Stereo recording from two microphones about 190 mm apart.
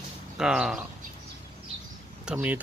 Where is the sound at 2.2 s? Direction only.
10° right (ahead or behind).